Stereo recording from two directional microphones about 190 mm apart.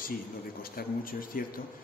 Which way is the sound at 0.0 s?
50° left (ahead or behind).